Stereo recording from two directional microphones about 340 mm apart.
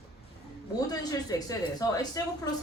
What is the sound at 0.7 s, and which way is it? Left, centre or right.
A woman's voice, centre.